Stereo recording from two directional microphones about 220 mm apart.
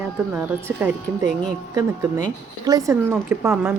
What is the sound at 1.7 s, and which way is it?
Speech, 15° right (ahead or behind).